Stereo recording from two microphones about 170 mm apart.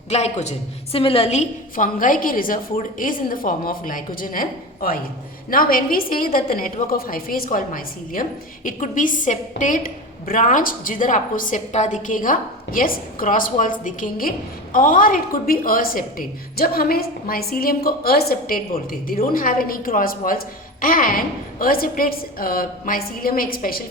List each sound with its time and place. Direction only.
0.1 s a woman's voice: 40° left (ahead or behind); by 23.8 s 60° left (ahead or behind)